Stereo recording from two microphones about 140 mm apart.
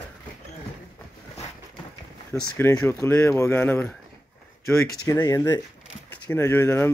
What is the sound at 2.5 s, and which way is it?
Speech, 15° left (ahead or behind).